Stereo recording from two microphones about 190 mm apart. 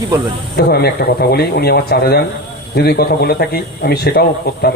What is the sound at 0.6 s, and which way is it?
Speech, 55° left (ahead or behind).